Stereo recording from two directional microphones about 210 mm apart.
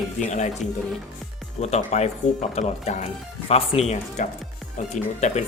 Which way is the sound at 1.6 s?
30° left (ahead or behind).